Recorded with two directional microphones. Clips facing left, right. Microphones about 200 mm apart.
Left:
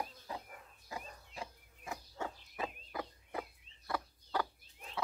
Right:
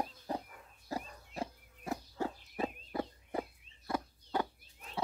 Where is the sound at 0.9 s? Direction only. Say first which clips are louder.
Right 6 dB; 40° right (ahead or behind).